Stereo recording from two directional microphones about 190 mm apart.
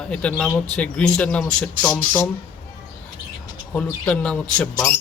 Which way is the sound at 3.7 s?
5° left (ahead or behind).